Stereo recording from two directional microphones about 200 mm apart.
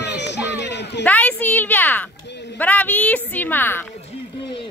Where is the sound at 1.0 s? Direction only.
10° left (ahead or behind).